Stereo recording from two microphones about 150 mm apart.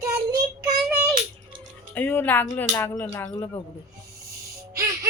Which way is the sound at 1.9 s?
15° left (ahead or behind).